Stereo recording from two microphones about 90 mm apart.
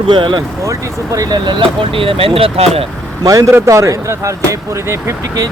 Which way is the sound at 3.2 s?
40° right (ahead or behind).